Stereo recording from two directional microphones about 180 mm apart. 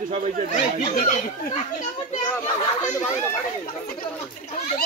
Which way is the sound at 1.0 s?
40° left (ahead or behind).